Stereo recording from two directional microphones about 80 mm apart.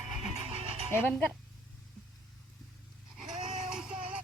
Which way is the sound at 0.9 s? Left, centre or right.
Left.